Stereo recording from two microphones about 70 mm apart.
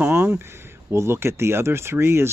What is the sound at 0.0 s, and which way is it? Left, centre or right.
Speech, right.